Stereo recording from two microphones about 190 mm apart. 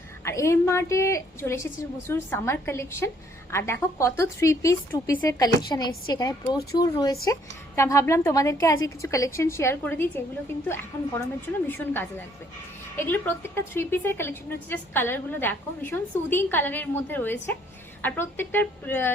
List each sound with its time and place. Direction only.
0.3 s a woman's voice: 15° left (ahead or behind)
11.7 s a woman's voice: 10° left (ahead or behind)